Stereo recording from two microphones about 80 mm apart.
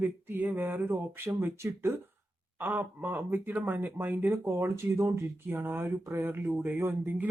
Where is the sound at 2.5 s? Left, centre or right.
Right.